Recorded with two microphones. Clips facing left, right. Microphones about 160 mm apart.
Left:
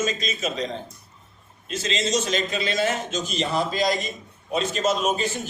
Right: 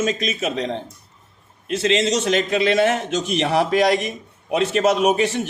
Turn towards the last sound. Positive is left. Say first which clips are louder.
# right 6 dB
turn(degrees=-70)  # may be behind; listen again after turning